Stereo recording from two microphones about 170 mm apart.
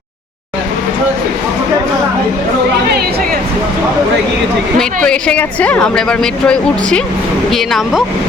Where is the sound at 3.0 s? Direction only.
65° right (ahead or behind).